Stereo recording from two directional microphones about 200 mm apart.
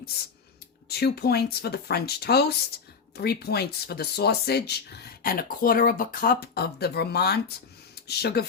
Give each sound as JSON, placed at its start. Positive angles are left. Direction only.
{"t": 0.9, "sound": "speech", "side_deg": 55}